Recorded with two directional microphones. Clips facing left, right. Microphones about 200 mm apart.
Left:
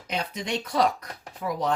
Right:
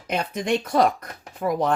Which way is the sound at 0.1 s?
50° right (ahead or behind).